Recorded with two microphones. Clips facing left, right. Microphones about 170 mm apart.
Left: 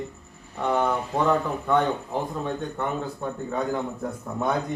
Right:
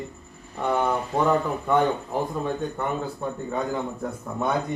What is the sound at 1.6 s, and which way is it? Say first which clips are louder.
Speech: right 1 dB; 10° right (ahead or behind).